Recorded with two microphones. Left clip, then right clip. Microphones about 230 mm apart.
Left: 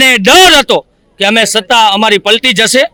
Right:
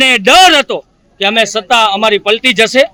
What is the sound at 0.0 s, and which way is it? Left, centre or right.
A woman's voice, left.